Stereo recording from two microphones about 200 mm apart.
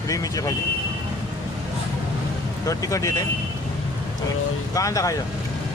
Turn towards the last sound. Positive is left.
turn(degrees=15)  # may be behind; listen again after turning